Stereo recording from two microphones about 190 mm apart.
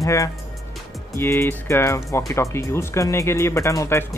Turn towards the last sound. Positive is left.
turn(degrees=15)  # may be behind; listen again after turning